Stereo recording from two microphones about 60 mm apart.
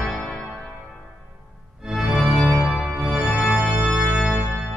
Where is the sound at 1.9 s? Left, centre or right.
Centre.